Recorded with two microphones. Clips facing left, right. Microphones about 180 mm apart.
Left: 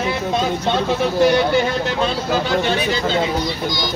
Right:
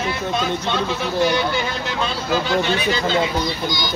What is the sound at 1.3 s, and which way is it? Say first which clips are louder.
Speech: left 5 dB; 55° left (ahead or behind).